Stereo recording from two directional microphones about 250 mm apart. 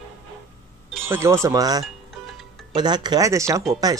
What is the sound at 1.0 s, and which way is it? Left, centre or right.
Speech, centre.